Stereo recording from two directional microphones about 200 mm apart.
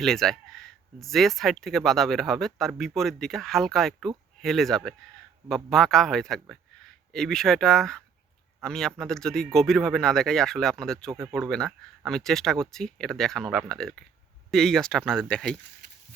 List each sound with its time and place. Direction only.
0.0 s speech: centre (ahead or behind)
15.8 s horse: 60° left (ahead or behind)